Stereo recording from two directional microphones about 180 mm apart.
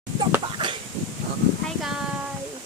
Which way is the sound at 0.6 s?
25° right (ahead or behind).